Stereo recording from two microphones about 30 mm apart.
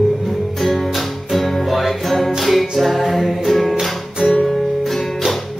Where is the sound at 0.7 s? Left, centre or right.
Centre.